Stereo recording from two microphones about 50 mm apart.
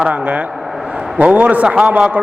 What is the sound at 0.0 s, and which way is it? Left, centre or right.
A man's voice, right.